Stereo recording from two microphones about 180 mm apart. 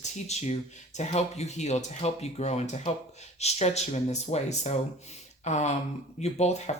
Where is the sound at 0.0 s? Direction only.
40° left (ahead or behind).